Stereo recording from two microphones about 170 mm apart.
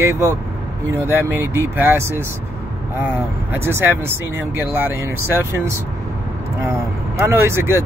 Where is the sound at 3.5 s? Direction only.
10° right (ahead or behind).